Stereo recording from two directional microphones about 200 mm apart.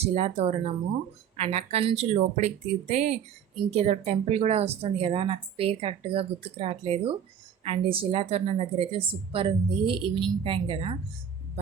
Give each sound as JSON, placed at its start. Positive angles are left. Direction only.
{"t": 0.0, "sound": "a woman's voice", "side_deg": -30}